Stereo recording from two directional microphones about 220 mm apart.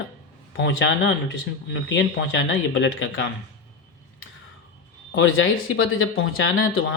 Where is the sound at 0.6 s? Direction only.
55° left (ahead or behind).